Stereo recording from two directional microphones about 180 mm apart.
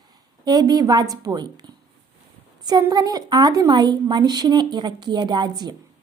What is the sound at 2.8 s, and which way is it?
A woman's voice, 20° right (ahead or behind).